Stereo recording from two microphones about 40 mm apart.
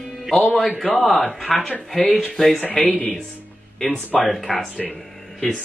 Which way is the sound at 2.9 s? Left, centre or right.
Left.